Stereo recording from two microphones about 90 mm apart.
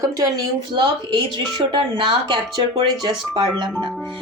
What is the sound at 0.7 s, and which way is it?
Speech, 55° right (ahead or behind).